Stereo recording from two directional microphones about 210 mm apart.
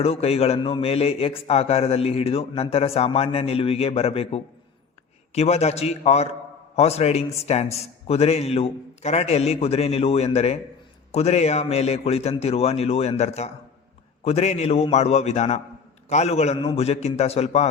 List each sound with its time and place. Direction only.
0.0 s a man's voice: 30° left (ahead or behind)